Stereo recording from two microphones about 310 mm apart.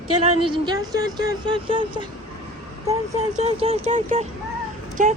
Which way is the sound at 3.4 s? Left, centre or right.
Centre.